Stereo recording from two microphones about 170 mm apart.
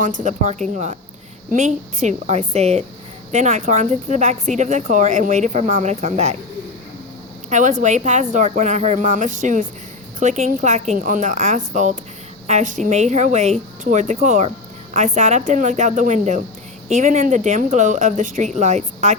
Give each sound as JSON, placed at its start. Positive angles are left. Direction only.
{"t": 0.0, "sound": "speech", "side_deg": -45}
{"t": 1.5, "sound": "a woman's voice", "side_deg": -45}
{"t": 7.5, "sound": "speech", "side_deg": -50}